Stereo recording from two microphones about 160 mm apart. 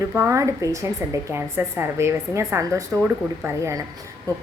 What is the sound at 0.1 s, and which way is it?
Speech, 15° right (ahead or behind).